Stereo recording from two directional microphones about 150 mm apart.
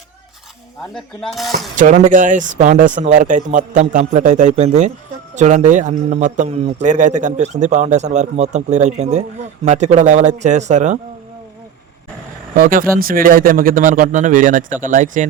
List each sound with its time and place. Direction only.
0.9 s speech: centre (ahead or behind)
1.7 s a man's voice: 60° right (ahead or behind)
12.5 s speech: 70° right (ahead or behind)